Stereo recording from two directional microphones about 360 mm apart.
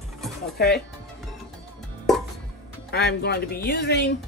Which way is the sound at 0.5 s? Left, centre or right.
Left.